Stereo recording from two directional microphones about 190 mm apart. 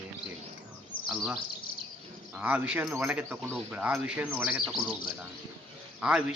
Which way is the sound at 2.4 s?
5° right (ahead or behind).